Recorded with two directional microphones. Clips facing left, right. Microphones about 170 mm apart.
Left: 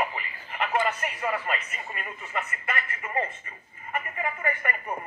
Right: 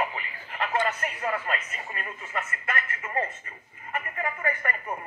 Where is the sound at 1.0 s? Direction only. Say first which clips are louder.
Even; 15° left (ahead or behind).